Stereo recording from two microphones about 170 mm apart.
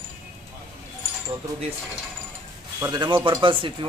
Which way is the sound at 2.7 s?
20° right (ahead or behind).